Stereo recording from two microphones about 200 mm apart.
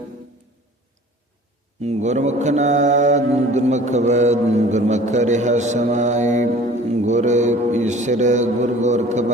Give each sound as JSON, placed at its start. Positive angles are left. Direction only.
{"t": 1.8, "sound": "mantra", "side_deg": -35}